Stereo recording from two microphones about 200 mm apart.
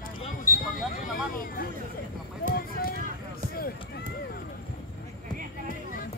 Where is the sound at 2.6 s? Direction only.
45° left (ahead or behind).